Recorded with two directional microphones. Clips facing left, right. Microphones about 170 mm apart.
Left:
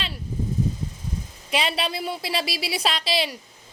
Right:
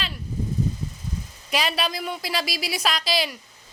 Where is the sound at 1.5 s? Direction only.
25° left (ahead or behind).